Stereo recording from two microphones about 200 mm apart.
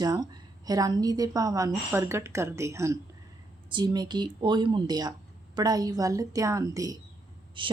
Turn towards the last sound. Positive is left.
turn(degrees=-25)  # may be behind; listen again after turning